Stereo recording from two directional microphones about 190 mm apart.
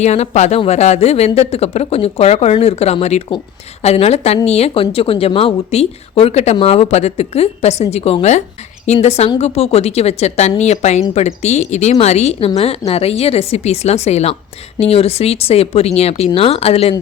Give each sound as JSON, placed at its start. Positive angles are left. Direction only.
{"t": 0.0, "sound": "speech", "side_deg": 35}